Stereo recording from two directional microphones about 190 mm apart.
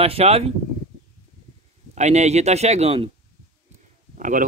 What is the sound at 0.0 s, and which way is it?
Speech, 30° right (ahead or behind).